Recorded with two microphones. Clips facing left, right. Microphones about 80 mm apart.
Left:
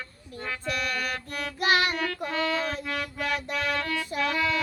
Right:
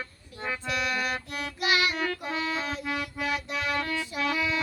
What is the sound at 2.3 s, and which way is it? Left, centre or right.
Music, centre.